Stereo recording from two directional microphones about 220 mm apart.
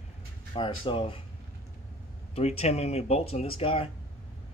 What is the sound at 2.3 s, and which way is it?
Speech, 25° left (ahead or behind).